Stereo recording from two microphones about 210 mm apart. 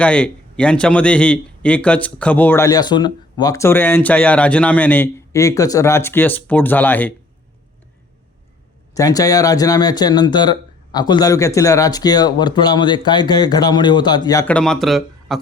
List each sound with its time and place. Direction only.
0.0 s speech: 5° left (ahead or behind)
9.0 s speech: 15° left (ahead or behind)
14.5 s speech: centre (ahead or behind)